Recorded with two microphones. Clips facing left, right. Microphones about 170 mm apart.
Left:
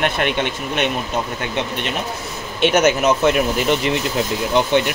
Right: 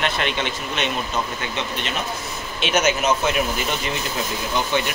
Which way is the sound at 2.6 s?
55° left (ahead or behind).